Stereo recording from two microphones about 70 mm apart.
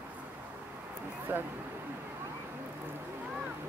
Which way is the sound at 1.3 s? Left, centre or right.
Right.